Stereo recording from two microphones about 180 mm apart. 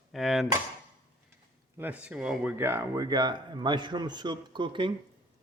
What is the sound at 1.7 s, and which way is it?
Speech, 10° right (ahead or behind).